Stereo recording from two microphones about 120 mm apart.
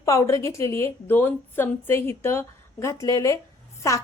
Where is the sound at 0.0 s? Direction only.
25° left (ahead or behind).